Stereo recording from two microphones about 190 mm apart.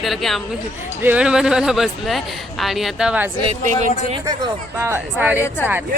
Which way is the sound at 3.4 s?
35° right (ahead or behind).